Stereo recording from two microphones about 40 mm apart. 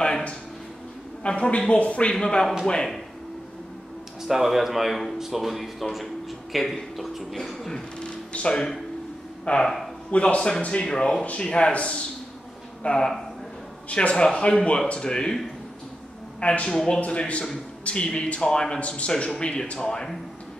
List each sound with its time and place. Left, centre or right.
1.2 s a man's voice: left
2.1 s speech: centre
4.3 s speech: centre
8.0 s a sound: left
9.5 s a man's voice: left
10.9 s a man's voice: centre
16.3 s a man's voice: left
17.3 s a man's voice: left
18.8 s a man's voice: left